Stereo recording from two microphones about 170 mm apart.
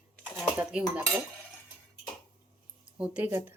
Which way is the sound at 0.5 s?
10° right (ahead or behind).